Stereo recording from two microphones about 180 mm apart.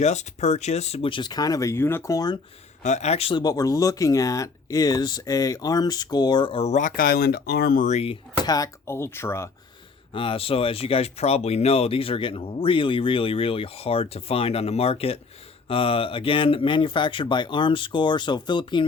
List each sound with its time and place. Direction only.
0.0 s speech: 40° left (ahead or behind); by 2.4 s 20° left (ahead or behind)
2.8 s speech: 40° left (ahead or behind); by 7.9 s 55° left (ahead or behind)
7.9 s speech: 35° left (ahead or behind); by 9.5 s 15° left (ahead or behind)
10.1 s speech: 30° left (ahead or behind)